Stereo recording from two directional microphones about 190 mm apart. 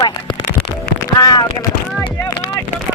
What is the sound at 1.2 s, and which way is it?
Speech, 20° left (ahead or behind).